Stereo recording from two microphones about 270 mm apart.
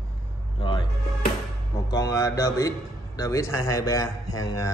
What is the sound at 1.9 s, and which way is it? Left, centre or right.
A man's voice, centre.